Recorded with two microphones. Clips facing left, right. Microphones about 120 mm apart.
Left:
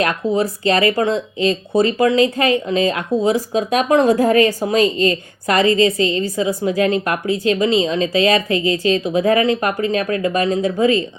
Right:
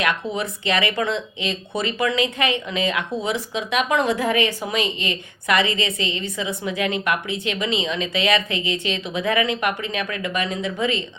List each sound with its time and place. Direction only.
0.0 s speech: 40° left (ahead or behind)